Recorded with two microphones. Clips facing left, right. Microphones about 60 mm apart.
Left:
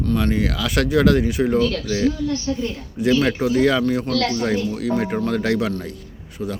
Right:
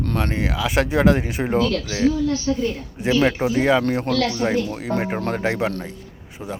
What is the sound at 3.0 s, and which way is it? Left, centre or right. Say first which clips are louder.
Speech: left 1 dB; right.